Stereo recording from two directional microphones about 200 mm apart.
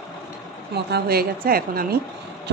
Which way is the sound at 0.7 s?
50° right (ahead or behind).